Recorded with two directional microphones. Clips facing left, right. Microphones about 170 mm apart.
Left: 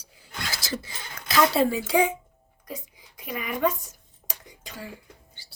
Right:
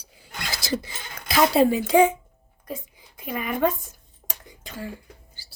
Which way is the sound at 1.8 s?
50° right (ahead or behind).